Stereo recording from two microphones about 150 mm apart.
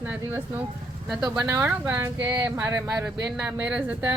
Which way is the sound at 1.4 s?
15° right (ahead or behind).